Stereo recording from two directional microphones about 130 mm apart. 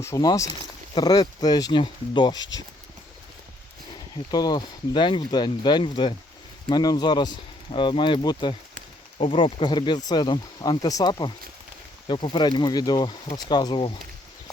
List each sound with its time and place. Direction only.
0.0 s speech: 25° left (ahead or behind)
4.3 s speech: 30° left (ahead or behind)
9.1 s speech: 45° left (ahead or behind)